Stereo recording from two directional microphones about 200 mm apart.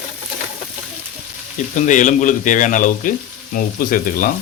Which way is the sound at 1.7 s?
40° left (ahead or behind).